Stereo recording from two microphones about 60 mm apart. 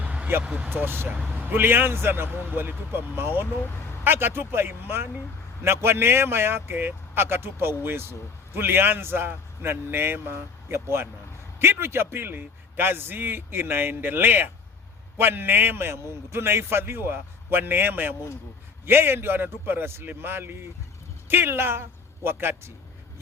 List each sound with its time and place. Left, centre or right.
0.0 s vehicle: right
0.4 s speech: centre
0.7 s a man's voice: right